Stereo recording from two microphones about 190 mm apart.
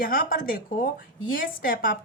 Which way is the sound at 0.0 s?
50° left (ahead or behind).